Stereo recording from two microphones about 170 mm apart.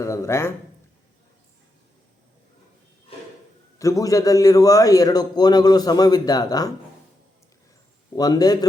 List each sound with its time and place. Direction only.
0.0 s speech: 15° left (ahead or behind)
3.8 s a man's voice: 20° left (ahead or behind)
8.1 s a man's voice: 20° left (ahead or behind)